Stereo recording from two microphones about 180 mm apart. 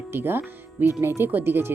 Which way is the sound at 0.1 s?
10° right (ahead or behind).